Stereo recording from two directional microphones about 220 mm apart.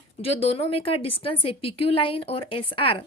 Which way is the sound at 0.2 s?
25° left (ahead or behind).